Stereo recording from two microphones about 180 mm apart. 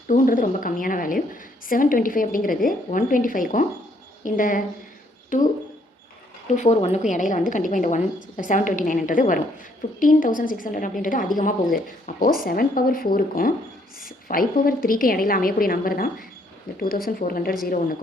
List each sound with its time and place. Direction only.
0.1 s a woman's voice: 45° left (ahead or behind)
6.6 s a woman's voice: 40° left (ahead or behind); by 17.7 s 55° left (ahead or behind)